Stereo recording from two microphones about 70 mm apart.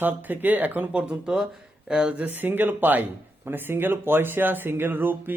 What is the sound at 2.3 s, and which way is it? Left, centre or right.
A man's voice, right.